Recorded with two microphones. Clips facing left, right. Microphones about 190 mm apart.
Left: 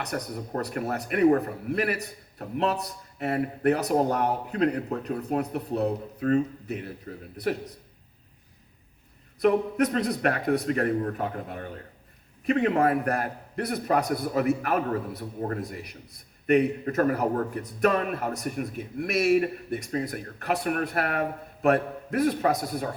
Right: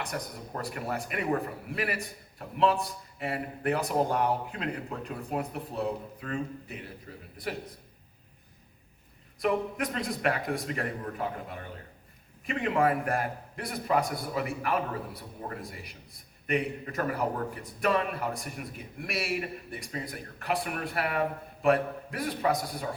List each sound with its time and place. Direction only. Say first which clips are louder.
0.0 s a man's voice: left 4 dB; 40° left (ahead or behind)
9.4 s a man's voice: left 6 dB; 40° left (ahead or behind)